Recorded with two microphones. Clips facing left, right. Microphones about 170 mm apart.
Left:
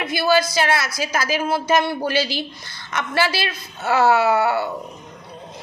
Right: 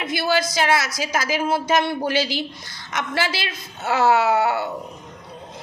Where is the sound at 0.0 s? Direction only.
20° right (ahead or behind).